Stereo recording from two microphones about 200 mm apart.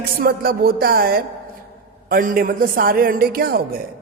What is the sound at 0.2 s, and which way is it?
A woman's voice, 50° right (ahead or behind).